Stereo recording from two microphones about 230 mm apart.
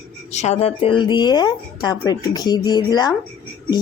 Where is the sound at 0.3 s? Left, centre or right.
Left.